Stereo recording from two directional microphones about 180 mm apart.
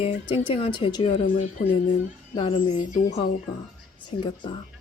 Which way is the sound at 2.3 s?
25° left (ahead or behind).